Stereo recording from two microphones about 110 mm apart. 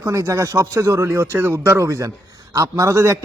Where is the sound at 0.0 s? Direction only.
25° right (ahead or behind).